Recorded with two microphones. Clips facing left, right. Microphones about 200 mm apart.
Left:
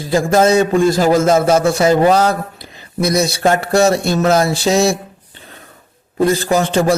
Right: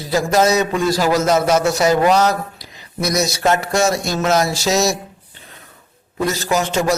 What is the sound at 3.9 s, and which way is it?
Speech, 60° left (ahead or behind).